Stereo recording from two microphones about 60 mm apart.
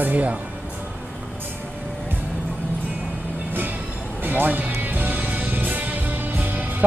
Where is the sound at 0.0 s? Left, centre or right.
Right.